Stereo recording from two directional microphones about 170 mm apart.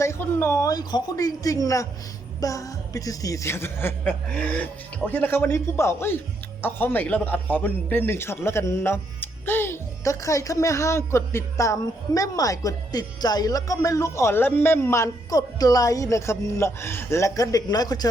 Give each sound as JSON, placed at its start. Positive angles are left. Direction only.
{"t": 0.0, "sound": "a man's voice", "side_deg": 15}